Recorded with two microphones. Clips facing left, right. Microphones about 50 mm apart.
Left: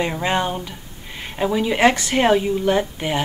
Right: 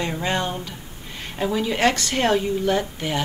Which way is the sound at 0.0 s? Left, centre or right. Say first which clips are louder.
Left 3 dB; centre.